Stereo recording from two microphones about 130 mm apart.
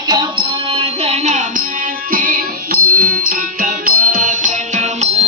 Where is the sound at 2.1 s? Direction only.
90° right.